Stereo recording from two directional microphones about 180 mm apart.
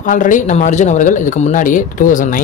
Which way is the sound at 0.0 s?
45° left (ahead or behind).